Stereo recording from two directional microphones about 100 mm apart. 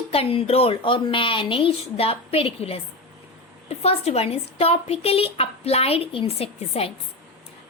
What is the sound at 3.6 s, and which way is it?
A woman's voice, 90° left.